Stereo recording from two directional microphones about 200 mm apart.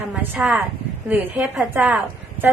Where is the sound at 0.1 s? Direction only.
5° right (ahead or behind).